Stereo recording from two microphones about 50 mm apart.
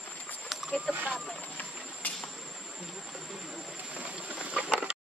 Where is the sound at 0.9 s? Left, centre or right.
Right.